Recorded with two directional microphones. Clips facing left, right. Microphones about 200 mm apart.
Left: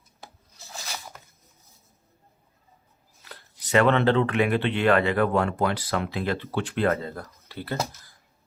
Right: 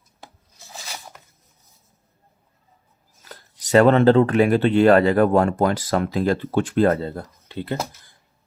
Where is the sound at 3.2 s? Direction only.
40° right (ahead or behind); by 7.8 s 20° right (ahead or behind).